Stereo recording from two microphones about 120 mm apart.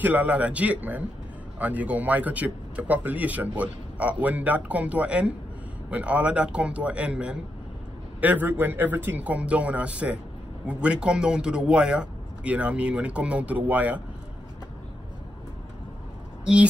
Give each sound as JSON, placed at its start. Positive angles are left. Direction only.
{"t": 0.0, "sound": "speech", "side_deg": -15}